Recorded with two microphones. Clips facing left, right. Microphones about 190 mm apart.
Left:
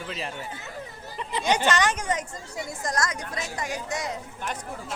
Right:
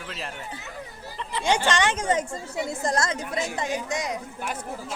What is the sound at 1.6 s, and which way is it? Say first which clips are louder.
A woman's voice: right 1 dB; 25° right (ahead or behind).